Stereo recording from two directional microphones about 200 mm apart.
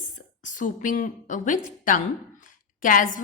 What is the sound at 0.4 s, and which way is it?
A woman's voice, 40° left (ahead or behind).